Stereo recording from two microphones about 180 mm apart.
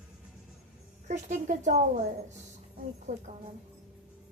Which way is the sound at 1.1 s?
45° right (ahead or behind).